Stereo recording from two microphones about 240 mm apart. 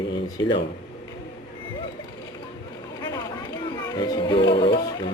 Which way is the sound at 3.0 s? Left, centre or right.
Centre.